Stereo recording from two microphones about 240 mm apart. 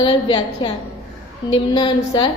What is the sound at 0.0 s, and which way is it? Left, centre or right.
A woman's voice, centre.